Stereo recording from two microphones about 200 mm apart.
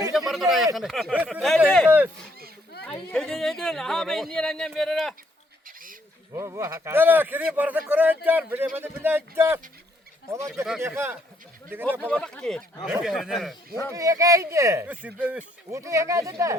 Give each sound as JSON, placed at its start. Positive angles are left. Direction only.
{"t": 0.1, "sound": "a sound", "side_deg": 0}
{"t": 0.8, "sound": "speech", "side_deg": 0}
{"t": 3.1, "sound": "speech", "side_deg": 5}
{"t": 5.6, "sound": "bird", "side_deg": -45}
{"t": 6.3, "sound": "speech", "side_deg": -15}
{"t": 11.9, "sound": "speech", "side_deg": 5}
{"t": 13.9, "sound": "speech", "side_deg": -15}